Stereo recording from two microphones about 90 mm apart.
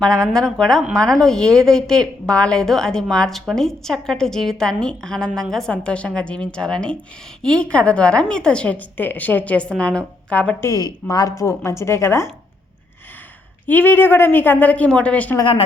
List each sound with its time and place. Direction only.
0.0 s a woman's voice: 10° left (ahead or behind)
10.6 s a woman's voice: 40° left (ahead or behind)
13.7 s a woman's voice: 20° left (ahead or behind)